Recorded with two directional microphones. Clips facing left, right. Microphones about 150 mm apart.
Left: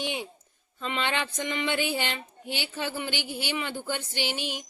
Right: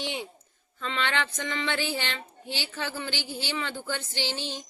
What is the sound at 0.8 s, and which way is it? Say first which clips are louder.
A woman's voice: even; 20° left (ahead or behind).